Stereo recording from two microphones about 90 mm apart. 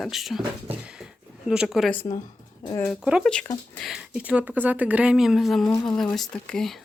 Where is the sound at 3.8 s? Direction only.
Centre (ahead or behind).